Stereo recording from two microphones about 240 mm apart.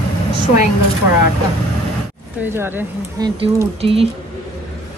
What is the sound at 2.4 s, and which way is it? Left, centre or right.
Speech, centre.